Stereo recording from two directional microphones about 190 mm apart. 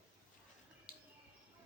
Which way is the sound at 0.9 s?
50° left (ahead or behind).